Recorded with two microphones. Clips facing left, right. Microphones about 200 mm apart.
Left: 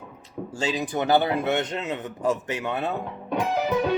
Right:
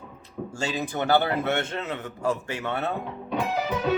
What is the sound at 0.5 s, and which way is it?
A man's voice, 20° left (ahead or behind).